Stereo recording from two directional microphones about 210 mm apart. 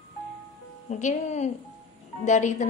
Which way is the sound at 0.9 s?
35° left (ahead or behind).